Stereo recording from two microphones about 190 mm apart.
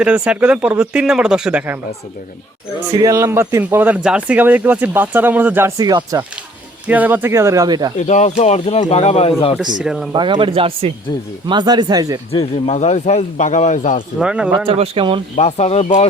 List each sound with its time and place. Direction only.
0.0 s speech: 5° right (ahead or behind)
2.9 s speech: 20° right (ahead or behind)
6.8 s speech: 10° right (ahead or behind)
7.9 s speech: 35° left (ahead or behind)
9.8 s speech: centre (ahead or behind)
10.1 s speech: 25° right (ahead or behind)
12.3 s speech: 30° left (ahead or behind)
14.2 s speech: 5° right (ahead or behind)
14.7 s speech: 30° right (ahead or behind)
15.4 s speech: 35° left (ahead or behind)